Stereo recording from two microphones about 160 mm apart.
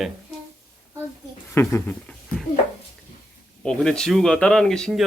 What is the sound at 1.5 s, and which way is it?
Speech, 15° left (ahead or behind).